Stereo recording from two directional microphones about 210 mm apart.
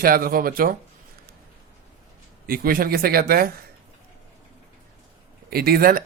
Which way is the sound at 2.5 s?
45° right (ahead or behind).